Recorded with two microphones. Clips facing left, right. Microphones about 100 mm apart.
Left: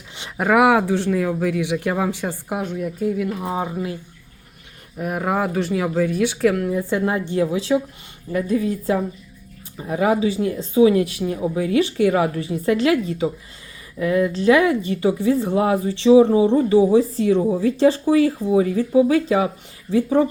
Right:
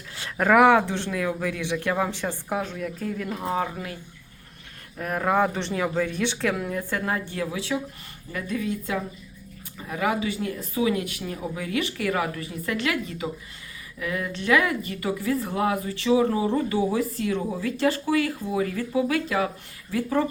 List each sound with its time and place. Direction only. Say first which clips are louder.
0.2 s speech: left 1 dB; 10° left (ahead or behind)
4.9 s speech: left 1 dB; 10° left (ahead or behind)
6.7 s speech: left 7 dB; 15° left (ahead or behind)